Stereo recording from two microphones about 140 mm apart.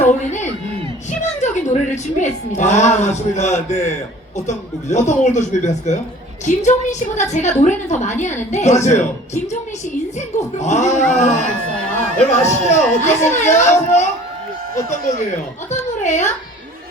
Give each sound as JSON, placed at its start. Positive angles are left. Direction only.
{"t": 0.0, "sound": "a man's voice", "side_deg": 60}
{"t": 15.7, "sound": "a woman's voice", "side_deg": 60}